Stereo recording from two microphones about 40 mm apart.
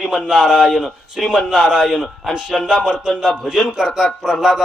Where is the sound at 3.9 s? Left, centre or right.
Centre.